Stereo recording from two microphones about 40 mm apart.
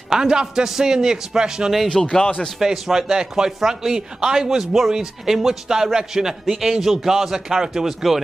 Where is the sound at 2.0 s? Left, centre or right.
Centre.